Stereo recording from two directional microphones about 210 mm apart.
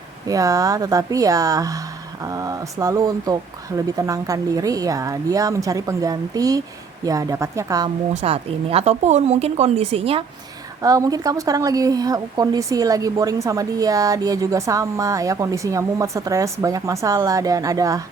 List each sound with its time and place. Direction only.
0.3 s a woman's voice: 15° right (ahead or behind)
8.1 s speech: 30° right (ahead or behind)
10.8 s a woman's voice: 15° right (ahead or behind)